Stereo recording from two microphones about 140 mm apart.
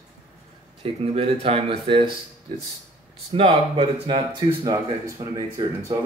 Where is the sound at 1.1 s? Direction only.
45° right (ahead or behind).